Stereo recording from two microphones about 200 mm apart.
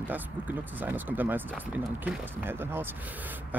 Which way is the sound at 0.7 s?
10° right (ahead or behind).